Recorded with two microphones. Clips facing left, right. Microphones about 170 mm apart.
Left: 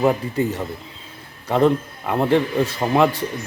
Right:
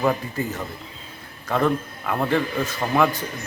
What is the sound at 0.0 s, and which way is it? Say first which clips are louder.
Speech: left 4 dB; 25° left (ahead or behind).